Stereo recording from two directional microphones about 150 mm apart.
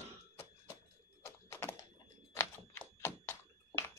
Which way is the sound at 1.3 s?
15° left (ahead or behind).